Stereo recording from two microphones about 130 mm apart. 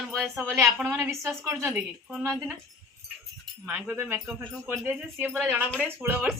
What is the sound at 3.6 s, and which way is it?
A woman's voice, 15° right (ahead or behind).